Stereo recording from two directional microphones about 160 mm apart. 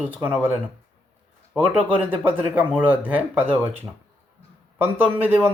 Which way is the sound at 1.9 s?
10° right (ahead or behind).